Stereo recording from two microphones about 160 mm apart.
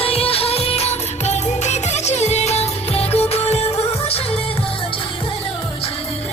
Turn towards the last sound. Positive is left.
turn(degrees=35)  # may be behind; listen again after turning